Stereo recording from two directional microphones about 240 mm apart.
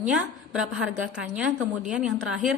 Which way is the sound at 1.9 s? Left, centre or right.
Centre.